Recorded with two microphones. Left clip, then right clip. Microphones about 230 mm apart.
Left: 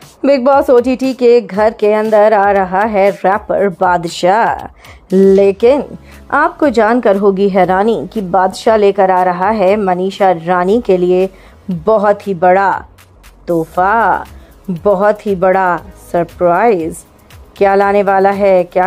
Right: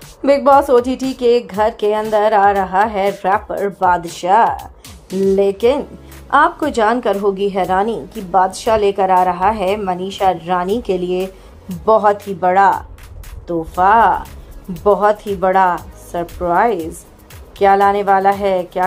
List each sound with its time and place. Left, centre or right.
0.2 s speech: left